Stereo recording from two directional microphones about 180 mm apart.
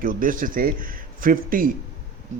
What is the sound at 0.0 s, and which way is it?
A man's voice, 50° right (ahead or behind).